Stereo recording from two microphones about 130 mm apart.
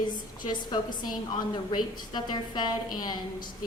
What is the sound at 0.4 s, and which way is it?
A woman's voice, 35° left (ahead or behind).